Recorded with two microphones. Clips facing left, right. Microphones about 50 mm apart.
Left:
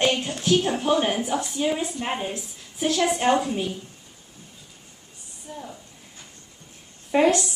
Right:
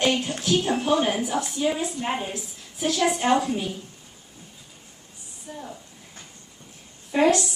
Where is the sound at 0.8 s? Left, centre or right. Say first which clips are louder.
Even; left.